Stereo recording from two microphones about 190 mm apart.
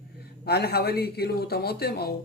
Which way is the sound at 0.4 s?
55° left (ahead or behind).